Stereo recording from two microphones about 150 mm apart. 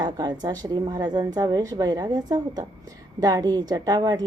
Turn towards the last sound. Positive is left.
turn(degrees=-25)  # may be behind; listen again after turning